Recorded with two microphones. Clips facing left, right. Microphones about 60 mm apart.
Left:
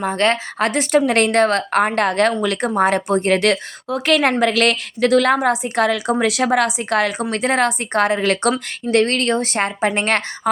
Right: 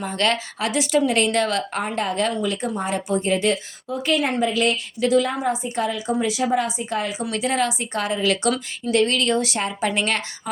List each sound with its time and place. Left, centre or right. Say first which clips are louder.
0.0 s a woman's voice: left 5 dB; left
7.3 s a woman's voice: left 4 dB; left